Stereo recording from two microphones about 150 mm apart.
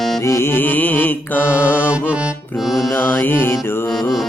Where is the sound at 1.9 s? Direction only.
10° right (ahead or behind).